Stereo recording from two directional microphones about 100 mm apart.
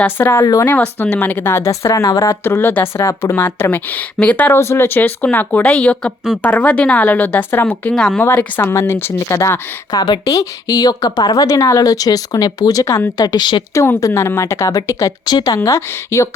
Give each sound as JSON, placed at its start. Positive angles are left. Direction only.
{"t": 0.0, "sound": "speech", "side_deg": 20}
{"t": 0.3, "sound": "speech", "side_deg": 35}
{"t": 0.6, "sound": "speech", "side_deg": 20}
{"t": 7.9, "sound": "speech", "side_deg": 5}
{"t": 8.2, "sound": "a woman's voice", "side_deg": 20}
{"t": 13.7, "sound": "speech", "side_deg": 30}